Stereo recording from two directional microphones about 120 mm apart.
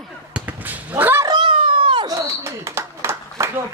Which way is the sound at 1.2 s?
40° right (ahead or behind).